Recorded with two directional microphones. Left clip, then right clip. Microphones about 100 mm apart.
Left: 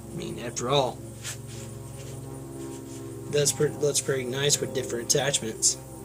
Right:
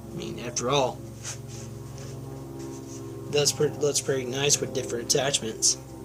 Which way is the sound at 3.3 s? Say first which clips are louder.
Right 1 dB; 40° left (ahead or behind).